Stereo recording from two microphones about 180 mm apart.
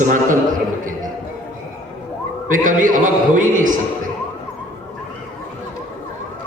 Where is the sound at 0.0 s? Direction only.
45° right (ahead or behind).